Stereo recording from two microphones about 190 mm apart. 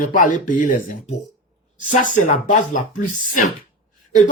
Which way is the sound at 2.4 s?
40° left (ahead or behind).